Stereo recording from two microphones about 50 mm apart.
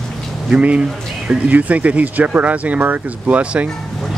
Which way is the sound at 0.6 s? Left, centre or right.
Right.